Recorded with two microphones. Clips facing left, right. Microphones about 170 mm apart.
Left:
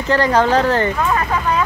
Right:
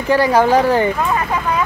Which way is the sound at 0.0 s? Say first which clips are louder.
Right 2 dB; 10° right (ahead or behind).